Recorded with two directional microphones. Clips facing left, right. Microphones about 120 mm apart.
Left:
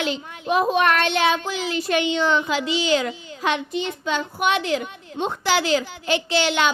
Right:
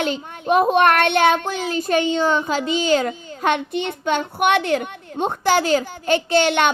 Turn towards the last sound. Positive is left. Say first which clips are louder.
# right 4 dB
turn(degrees=-55)  # may be behind; listen again after turning